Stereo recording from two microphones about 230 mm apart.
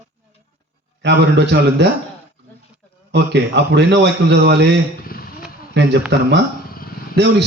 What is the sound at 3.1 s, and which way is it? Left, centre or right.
A man's voice, right.